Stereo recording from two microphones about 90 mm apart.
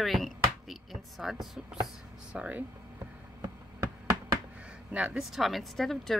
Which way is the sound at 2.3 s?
15° right (ahead or behind).